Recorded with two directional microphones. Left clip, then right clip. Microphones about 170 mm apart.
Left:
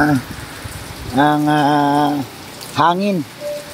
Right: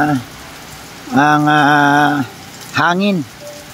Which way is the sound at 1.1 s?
10° right (ahead or behind).